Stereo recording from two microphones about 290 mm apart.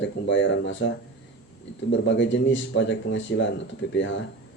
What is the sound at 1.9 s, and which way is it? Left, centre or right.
Speech, left.